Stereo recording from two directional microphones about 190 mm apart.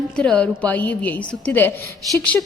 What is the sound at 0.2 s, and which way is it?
A woman's voice, 5° left (ahead or behind).